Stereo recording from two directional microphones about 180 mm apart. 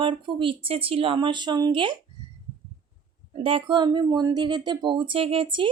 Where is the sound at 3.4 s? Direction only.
30° right (ahead or behind).